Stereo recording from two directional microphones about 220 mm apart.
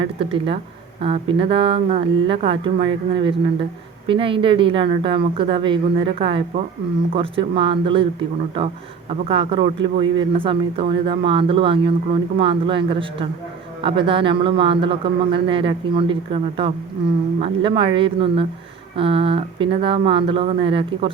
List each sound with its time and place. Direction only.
0.0 s speech: 25° right (ahead or behind)